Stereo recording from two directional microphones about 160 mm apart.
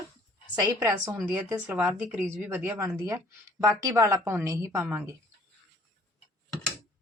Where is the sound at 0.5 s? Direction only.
20° right (ahead or behind).